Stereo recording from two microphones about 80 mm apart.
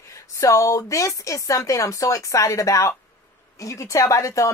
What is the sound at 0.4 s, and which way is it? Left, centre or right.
A woman's voice, left.